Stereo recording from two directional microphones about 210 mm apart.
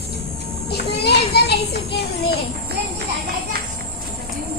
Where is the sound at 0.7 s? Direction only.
50° left (ahead or behind).